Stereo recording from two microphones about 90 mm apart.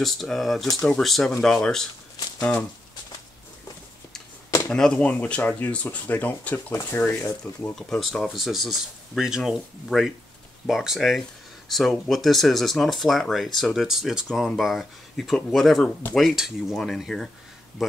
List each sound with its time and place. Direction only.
0.0 s speech: 5° left (ahead or behind)
4.5 s a sound: 30° left (ahead or behind)
4.7 s speech: 10° left (ahead or behind)
6.7 s speech: 35° left (ahead or behind)
7.1 s speech: 25° left (ahead or behind)
7.9 s speech: 5° left (ahead or behind)